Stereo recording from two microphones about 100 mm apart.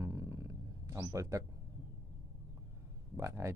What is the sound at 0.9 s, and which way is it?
Speech, 30° right (ahead or behind).